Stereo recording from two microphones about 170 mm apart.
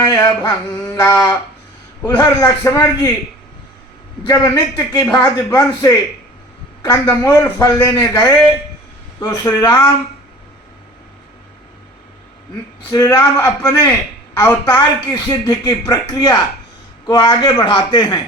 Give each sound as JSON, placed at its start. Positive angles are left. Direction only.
{"t": 0.0, "sound": "speech", "side_deg": 20}
{"t": 4.2, "sound": "speech", "side_deg": 20}
{"t": 9.2, "sound": "speech", "side_deg": 20}
{"t": 12.9, "sound": "speech", "side_deg": 20}